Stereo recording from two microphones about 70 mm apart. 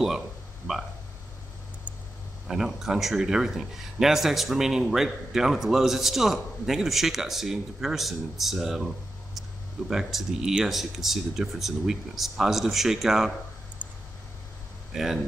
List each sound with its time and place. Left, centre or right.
2.4 s speech: centre
13.8 s a sound: right
14.9 s speech: centre